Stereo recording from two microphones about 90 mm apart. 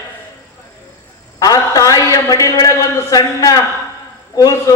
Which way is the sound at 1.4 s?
40° left (ahead or behind).